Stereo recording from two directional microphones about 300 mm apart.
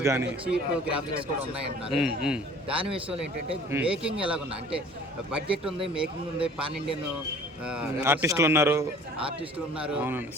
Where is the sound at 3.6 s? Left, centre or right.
Centre.